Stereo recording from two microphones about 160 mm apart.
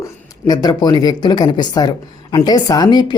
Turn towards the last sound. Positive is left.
turn(degrees=25)  # may be behind; listen again after turning